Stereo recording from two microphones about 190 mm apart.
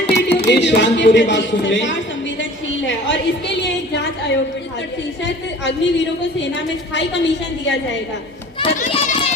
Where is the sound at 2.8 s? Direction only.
65° left (ahead or behind).